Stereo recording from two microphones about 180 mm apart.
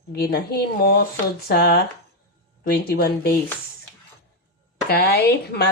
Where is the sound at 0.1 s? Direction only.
60° left (ahead or behind).